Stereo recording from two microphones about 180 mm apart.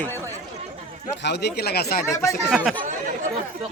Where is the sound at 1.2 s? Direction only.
70° left (ahead or behind).